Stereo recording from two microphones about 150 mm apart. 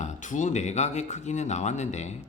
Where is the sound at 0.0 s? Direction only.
55° left (ahead or behind).